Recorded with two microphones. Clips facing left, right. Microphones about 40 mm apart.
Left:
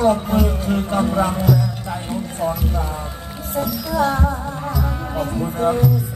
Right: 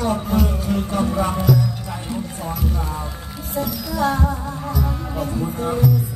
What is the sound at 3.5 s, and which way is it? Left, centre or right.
Music, left.